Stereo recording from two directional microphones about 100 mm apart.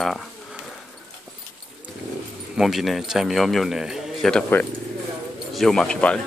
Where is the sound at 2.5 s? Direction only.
Centre (ahead or behind).